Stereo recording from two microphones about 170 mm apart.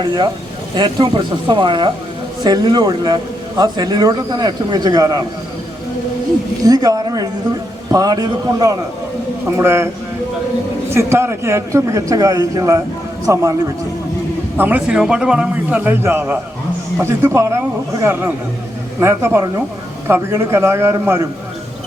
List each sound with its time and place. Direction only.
0.8 s a man's voice: 30° right (ahead or behind)
6.7 s a man's voice: 20° right (ahead or behind)
14.6 s a man's voice: 10° right (ahead or behind)